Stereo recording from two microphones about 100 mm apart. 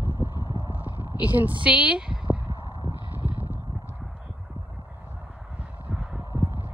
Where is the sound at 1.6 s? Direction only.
10° right (ahead or behind).